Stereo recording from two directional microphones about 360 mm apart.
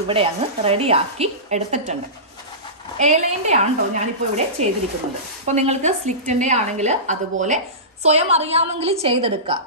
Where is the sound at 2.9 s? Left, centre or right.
Centre.